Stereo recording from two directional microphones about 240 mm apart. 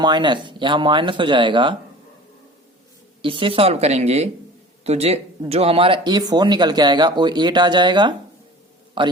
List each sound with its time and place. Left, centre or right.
0.0 s speech: centre
3.2 s speech: right